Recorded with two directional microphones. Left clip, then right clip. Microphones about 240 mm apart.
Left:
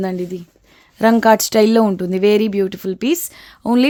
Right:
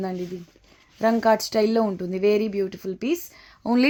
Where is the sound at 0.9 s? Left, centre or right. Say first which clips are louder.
Left 7 dB; left.